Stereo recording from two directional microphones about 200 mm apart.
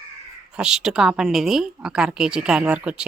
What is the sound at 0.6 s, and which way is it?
Speech, 5° right (ahead or behind).